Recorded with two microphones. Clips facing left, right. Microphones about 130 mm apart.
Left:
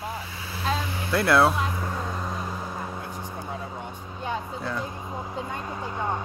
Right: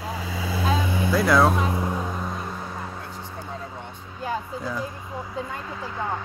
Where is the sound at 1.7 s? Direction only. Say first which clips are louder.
Right 4 dB; 15° right (ahead or behind); by 3.5 s 15° left (ahead or behind).